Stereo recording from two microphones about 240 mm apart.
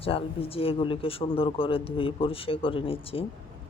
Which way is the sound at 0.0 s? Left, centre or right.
Left.